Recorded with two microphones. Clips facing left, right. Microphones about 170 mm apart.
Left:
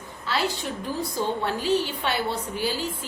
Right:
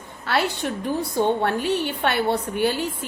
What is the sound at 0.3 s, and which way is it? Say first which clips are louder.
A woman's voice: right 4 dB; 60° right (ahead or behind).